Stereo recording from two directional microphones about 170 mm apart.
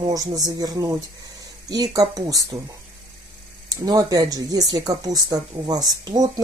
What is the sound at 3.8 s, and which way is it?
Speech, 20° right (ahead or behind).